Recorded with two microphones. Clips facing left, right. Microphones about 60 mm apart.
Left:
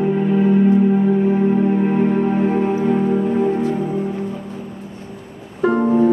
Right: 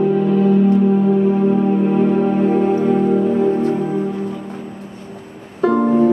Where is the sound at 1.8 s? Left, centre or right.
Left.